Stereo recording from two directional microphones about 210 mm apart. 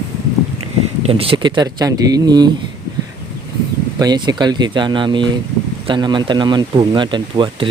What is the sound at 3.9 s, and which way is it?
Speech, 20° right (ahead or behind).